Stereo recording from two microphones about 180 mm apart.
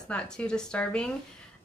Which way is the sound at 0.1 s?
5° left (ahead or behind).